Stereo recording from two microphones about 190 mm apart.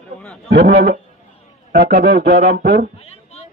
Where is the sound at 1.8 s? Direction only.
55° right (ahead or behind).